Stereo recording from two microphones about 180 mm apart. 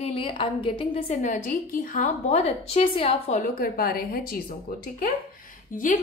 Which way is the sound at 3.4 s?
55° left (ahead or behind).